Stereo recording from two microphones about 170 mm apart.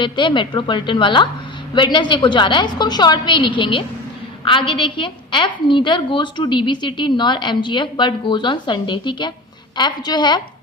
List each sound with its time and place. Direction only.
0.0 s a woman's voice: 30° left (ahead or behind)